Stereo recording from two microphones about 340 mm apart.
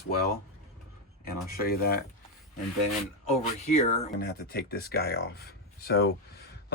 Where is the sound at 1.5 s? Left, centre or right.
Left.